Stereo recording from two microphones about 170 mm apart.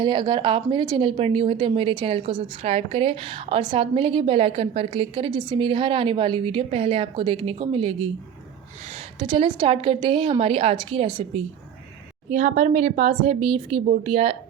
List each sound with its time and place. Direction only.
0.0 s speech: 25° right (ahead or behind)
9.1 s speech: 30° right (ahead or behind)
12.3 s speech: 45° right (ahead or behind)